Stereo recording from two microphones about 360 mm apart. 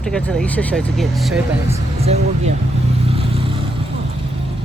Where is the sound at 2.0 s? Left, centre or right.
Centre.